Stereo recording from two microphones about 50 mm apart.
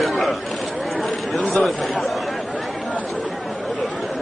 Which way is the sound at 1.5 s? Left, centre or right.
Centre.